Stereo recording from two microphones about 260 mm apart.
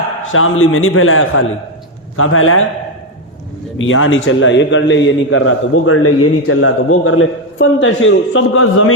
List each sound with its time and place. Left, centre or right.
0.3 s a man's voice: left
3.8 s a man's voice: left